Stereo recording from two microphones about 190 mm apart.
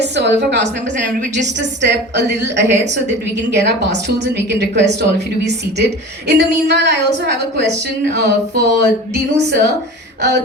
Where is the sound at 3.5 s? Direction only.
65° right (ahead or behind).